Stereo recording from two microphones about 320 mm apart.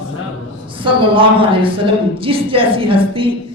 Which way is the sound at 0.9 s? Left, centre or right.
Centre.